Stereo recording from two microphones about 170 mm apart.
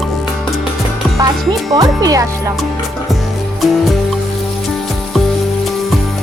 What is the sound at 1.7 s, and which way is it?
Speech, 20° right (ahead or behind).